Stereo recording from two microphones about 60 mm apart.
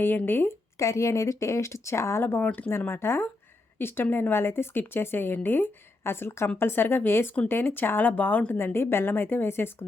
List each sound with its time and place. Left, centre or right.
0.0 s speech: left
0.8 s speech: left
2.4 s speech: left
2.6 s speech: left
8.5 s speech: left